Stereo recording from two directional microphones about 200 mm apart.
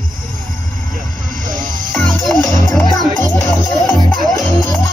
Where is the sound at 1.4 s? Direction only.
40° right (ahead or behind).